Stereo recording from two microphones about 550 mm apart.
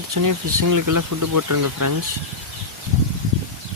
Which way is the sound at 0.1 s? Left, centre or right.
Right.